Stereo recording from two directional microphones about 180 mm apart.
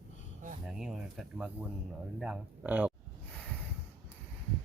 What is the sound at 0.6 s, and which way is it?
Speech, 5° right (ahead or behind).